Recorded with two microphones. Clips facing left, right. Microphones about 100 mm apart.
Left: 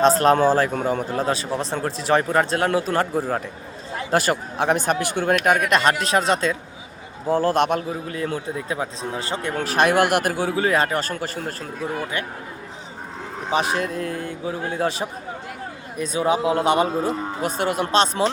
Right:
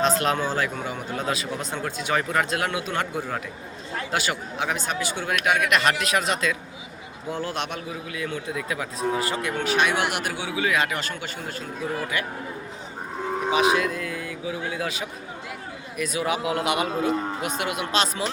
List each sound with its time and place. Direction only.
0.0 s speech: 40° left (ahead or behind)
1.1 s speech: 35° left (ahead or behind)
13.5 s speech: 40° left (ahead or behind)